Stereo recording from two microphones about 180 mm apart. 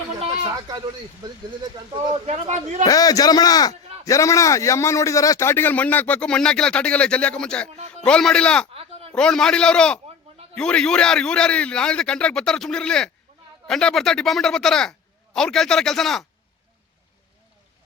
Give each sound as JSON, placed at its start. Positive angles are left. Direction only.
{"t": 0.2, "sound": "a sound", "side_deg": -35}
{"t": 1.2, "sound": "speech", "side_deg": -25}
{"t": 2.2, "sound": "a man's voice", "side_deg": -40}
{"t": 2.8, "sound": "a man's voice", "side_deg": 20}
{"t": 8.7, "sound": "a sound", "side_deg": -30}
{"t": 9.1, "sound": "speech", "side_deg": 5}